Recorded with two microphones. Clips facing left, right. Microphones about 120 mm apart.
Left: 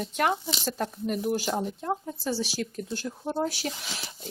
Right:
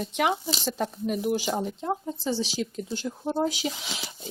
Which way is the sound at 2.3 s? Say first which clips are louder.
Right 1 dB; 5° left (ahead or behind).